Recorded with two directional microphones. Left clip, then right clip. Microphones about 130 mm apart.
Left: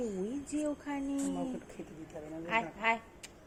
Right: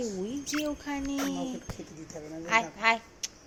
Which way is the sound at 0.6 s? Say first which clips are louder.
Right 1 dB; 15° right (ahead or behind).